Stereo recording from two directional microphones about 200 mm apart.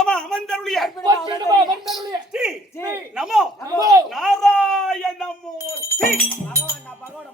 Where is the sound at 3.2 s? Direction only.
5° right (ahead or behind).